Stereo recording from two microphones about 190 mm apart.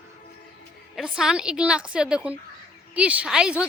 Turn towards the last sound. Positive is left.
turn(degrees=-5)  # may be behind; listen again after turning